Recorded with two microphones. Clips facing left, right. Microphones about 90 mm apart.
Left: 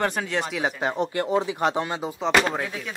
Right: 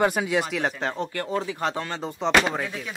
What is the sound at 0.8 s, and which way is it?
Speech, 15° left (ahead or behind).